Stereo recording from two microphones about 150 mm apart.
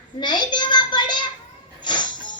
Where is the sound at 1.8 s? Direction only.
30° left (ahead or behind).